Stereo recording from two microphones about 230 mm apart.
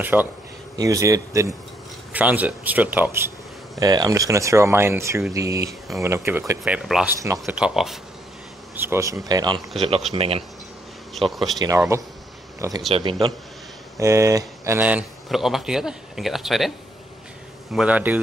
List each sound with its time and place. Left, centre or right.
0.0 s a man's voice: centre; by 10.4 s right
11.1 s speech: centre
11.5 s a man's voice: centre
17.7 s speech: centre